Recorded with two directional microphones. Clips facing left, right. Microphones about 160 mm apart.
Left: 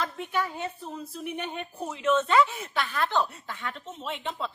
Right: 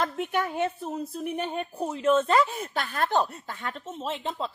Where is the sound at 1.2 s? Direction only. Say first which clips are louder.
Right 2 dB; 40° right (ahead or behind).